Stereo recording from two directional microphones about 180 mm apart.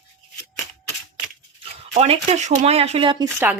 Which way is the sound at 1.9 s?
35° right (ahead or behind).